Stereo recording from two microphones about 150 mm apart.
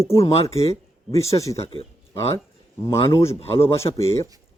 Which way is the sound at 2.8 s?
25° left (ahead or behind).